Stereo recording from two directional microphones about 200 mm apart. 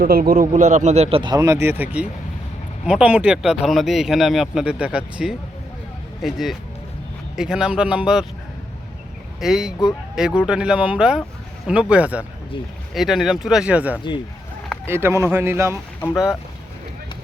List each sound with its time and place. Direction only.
0.0 s a man's voice: 45° right (ahead or behind); by 1.4 s 25° right (ahead or behind)
1.4 s speech: 10° right (ahead or behind)
9.4 s speech: centre (ahead or behind)